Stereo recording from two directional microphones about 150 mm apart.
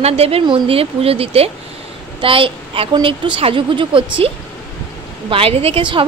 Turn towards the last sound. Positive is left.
turn(degrees=-35)  # may be behind; listen again after turning